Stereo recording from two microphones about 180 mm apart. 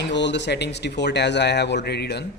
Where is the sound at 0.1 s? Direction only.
75° left (ahead or behind).